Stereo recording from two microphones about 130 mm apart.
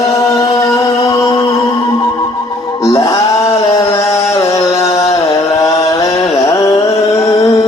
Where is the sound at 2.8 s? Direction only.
25° left (ahead or behind).